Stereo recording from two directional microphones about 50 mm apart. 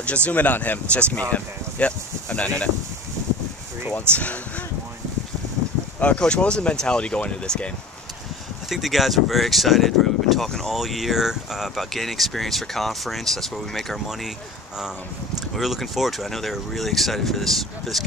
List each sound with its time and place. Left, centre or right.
0.0 s speech: left
3.9 s speech: left
5.9 s speech: left
8.6 s speech: centre
10.7 s speech: centre
15.5 s speech: centre